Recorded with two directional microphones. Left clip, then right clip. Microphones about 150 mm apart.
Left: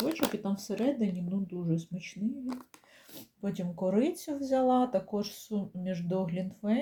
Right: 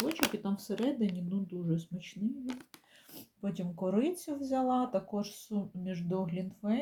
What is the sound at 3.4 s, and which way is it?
Speech, 5° left (ahead or behind).